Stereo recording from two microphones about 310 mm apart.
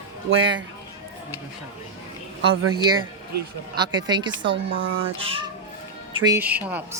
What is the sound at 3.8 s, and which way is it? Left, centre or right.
Speech, centre.